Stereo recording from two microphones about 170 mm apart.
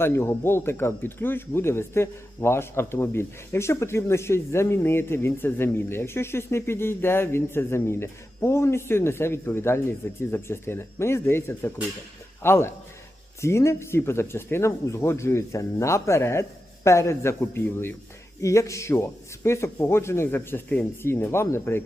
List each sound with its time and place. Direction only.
0.0 s speech: 15° left (ahead or behind)